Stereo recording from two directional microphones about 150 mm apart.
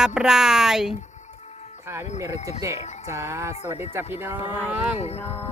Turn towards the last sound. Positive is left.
turn(degrees=45)  # may be behind; listen again after turning